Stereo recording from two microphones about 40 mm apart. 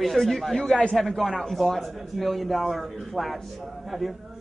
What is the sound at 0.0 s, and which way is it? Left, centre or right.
Speech, centre.